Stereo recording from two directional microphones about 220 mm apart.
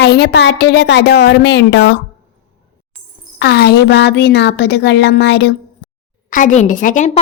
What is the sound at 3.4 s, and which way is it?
A woman's voice, 45° left (ahead or behind).